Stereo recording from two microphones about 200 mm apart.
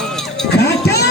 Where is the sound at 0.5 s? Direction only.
55° left (ahead or behind).